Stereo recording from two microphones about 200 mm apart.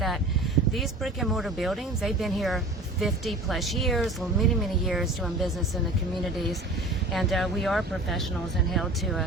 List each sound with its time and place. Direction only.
0.7 s speech: centre (ahead or behind)
7.1 s speech: centre (ahead or behind)